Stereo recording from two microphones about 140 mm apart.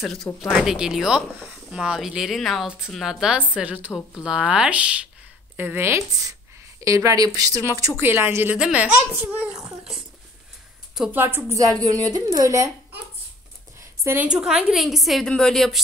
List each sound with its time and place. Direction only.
0.0 s a child's voice: centre (ahead or behind)
11.1 s a child's voice: 15° right (ahead or behind)
13.7 s speech: 15° right (ahead or behind); by 15.8 s 5° left (ahead or behind)